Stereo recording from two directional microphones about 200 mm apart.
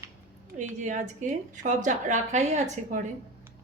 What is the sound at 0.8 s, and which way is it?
A woman's voice, 40° right (ahead or behind).